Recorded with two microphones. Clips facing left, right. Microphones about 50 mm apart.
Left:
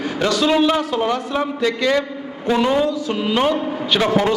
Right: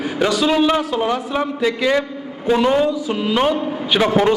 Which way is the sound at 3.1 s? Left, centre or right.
Centre.